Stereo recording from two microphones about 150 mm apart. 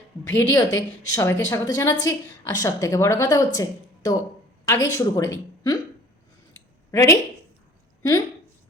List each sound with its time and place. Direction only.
0.3 s a woman's voice: 20° left (ahead or behind)
6.9 s a woman's voice: 20° left (ahead or behind)